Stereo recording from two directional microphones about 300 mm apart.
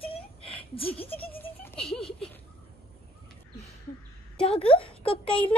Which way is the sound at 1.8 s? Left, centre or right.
Centre.